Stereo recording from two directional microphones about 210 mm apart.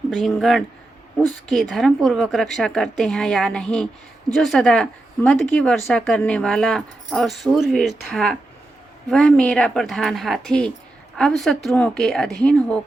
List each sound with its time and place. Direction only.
0.1 s speech: centre (ahead or behind)